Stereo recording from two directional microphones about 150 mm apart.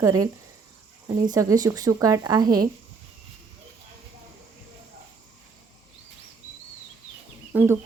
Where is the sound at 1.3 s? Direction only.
25° right (ahead or behind).